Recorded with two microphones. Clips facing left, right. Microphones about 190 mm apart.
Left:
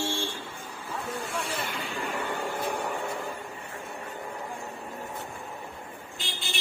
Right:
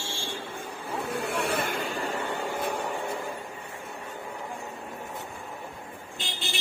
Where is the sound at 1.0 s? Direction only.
60° right (ahead or behind); by 2.2 s 40° right (ahead or behind).